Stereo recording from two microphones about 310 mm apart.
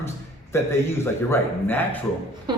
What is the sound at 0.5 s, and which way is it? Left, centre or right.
Speech, centre.